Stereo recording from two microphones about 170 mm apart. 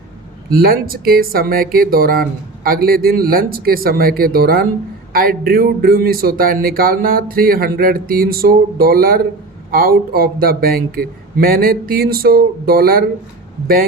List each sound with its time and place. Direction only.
0.5 s speech: 60° right (ahead or behind)